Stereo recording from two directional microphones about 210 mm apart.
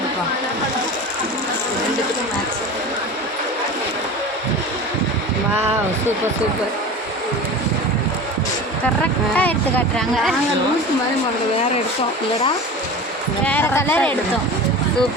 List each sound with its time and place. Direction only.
9.3 s speech: 5° left (ahead or behind)
13.4 s speech: 10° left (ahead or behind)